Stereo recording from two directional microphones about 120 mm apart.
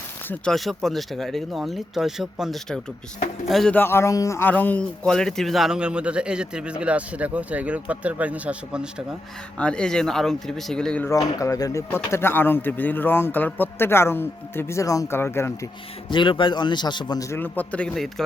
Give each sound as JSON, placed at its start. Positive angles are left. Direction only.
{"t": 0.5, "sound": "speech", "side_deg": 0}
{"t": 3.8, "sound": "speech", "side_deg": 20}
{"t": 9.6, "sound": "speech", "side_deg": 10}
{"t": 11.1, "sound": "speech", "side_deg": 30}
{"t": 16.0, "sound": "a man's voice", "side_deg": 40}
{"t": 17.4, "sound": "a man's voice", "side_deg": 15}